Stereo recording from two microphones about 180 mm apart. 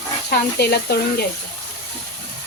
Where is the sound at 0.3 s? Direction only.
60° left (ahead or behind).